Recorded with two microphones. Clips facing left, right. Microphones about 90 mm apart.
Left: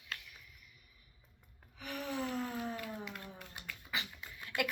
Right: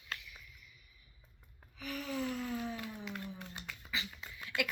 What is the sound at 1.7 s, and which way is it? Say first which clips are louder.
Gasp: even; 45° left (ahead or behind).